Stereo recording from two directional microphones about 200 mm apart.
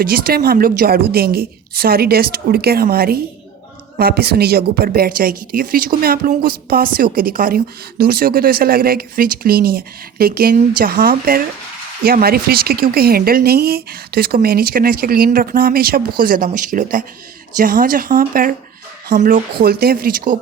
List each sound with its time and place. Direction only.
0.0 s a woman's voice: 50° right (ahead or behind)